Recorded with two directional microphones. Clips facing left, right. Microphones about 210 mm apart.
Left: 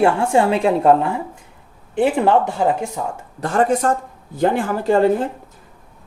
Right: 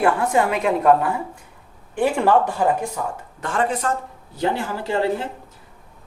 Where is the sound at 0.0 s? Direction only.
30° left (ahead or behind).